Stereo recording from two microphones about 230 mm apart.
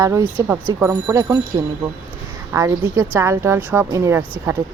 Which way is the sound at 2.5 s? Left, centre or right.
Centre.